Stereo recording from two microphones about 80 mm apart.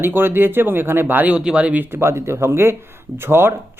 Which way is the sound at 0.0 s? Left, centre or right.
Right.